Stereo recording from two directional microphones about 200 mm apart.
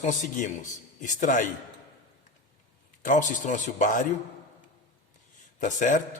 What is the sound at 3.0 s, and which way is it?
A man's voice, 40° left (ahead or behind).